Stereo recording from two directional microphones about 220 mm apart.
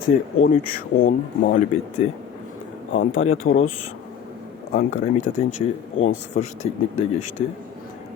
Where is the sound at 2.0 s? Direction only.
30° left (ahead or behind).